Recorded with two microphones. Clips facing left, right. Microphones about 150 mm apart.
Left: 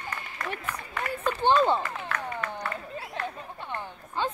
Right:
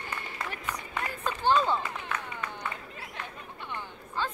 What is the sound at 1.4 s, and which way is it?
Speech, 25° left (ahead or behind).